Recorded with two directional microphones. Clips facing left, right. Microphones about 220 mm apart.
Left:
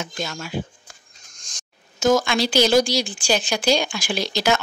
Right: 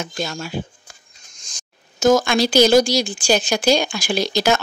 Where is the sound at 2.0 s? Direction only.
45° right (ahead or behind).